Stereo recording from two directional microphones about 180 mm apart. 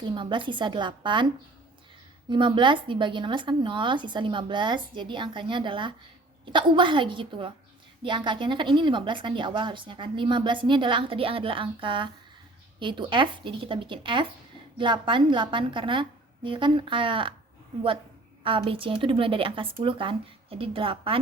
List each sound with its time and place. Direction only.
0.0 s a woman's voice: 25° right (ahead or behind)
2.3 s a woman's voice: 25° right (ahead or behind)
18.4 s a woman's voice: 30° right (ahead or behind)